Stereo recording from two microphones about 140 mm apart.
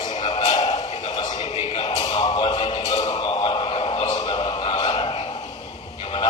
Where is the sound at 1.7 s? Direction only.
30° left (ahead or behind).